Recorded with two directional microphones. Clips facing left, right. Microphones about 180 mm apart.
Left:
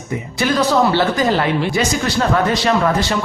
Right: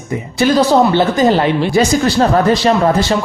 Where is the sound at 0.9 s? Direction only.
25° right (ahead or behind).